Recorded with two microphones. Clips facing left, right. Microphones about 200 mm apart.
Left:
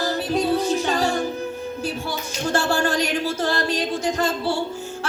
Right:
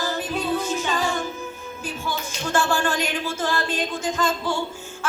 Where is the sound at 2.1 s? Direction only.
40° left (ahead or behind).